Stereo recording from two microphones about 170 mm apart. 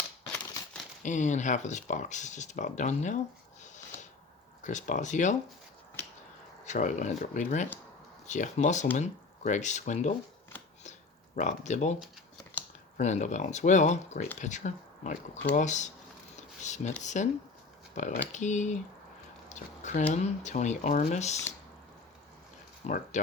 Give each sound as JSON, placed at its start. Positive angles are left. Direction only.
{"t": 0.3, "sound": "crumpling", "side_deg": 10}
{"t": 1.0, "sound": "speech", "side_deg": 45}
{"t": 3.6, "sound": "a sound", "side_deg": 45}
{"t": 4.6, "sound": "speech", "side_deg": 45}
{"t": 6.7, "sound": "speech", "side_deg": 50}
{"t": 11.3, "sound": "speech", "side_deg": 45}
{"t": 13.0, "sound": "speech", "side_deg": 45}
{"t": 16.3, "sound": "a sound", "side_deg": 45}
{"t": 17.0, "sound": "speech", "side_deg": 45}
{"t": 22.8, "sound": "speech", "side_deg": 40}